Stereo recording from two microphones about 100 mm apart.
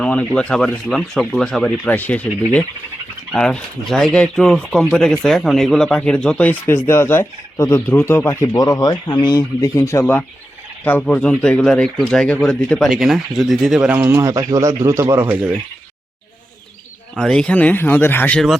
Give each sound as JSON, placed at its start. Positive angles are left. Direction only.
{"t": 0.0, "sound": "speech", "side_deg": 10}
{"t": 1.8, "sound": "speech", "side_deg": 15}
{"t": 3.3, "sound": "speech", "side_deg": 5}
{"t": 8.5, "sound": "speech", "side_deg": 40}
{"t": 9.6, "sound": "speech", "side_deg": 30}
{"t": 12.9, "sound": "speech", "side_deg": -5}
{"t": 14.0, "sound": "speech", "side_deg": -30}
{"t": 17.2, "sound": "speech", "side_deg": 5}